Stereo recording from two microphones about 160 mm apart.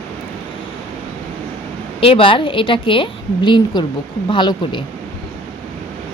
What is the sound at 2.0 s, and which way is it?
A woman's voice, 35° left (ahead or behind).